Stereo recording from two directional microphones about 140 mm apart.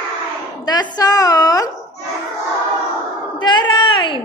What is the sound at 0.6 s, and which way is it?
A woman's voice, 30° left (ahead or behind).